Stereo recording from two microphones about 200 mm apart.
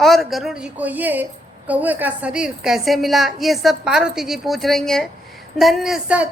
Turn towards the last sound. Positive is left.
turn(degrees=-5)  # may be behind; listen again after turning